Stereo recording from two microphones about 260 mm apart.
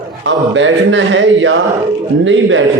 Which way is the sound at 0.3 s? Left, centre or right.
Right.